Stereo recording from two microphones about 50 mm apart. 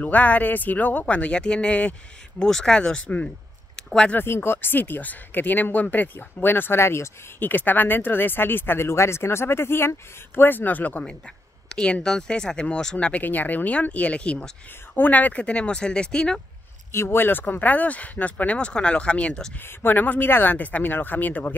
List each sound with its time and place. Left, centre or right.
0.0 s speech: left
1.8 s speech: left
2.4 s speech: centre
3.7 s a sound: centre
4.2 s speech: left
7.3 s speech: left
11.2 s speech: centre
13.2 s speech: left
15.0 s speech: left; by 16.3 s centre
16.9 s speech: left
19.6 s speech: left